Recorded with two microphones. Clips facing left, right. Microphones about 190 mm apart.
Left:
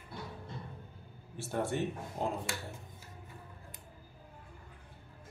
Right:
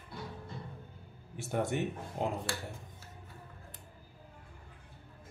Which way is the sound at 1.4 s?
15° right (ahead or behind).